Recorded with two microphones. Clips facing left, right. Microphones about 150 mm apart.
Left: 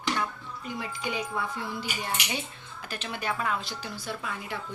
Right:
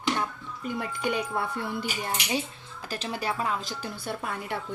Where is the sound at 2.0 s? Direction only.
35° right (ahead or behind).